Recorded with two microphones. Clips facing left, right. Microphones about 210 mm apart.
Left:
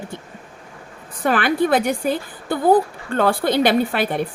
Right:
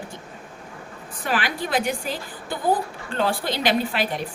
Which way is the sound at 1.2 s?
55° left (ahead or behind).